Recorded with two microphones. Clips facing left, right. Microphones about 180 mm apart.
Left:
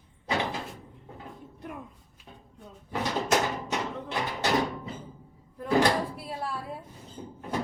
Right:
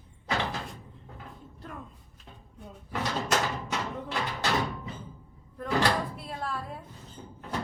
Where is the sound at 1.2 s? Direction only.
15° left (ahead or behind).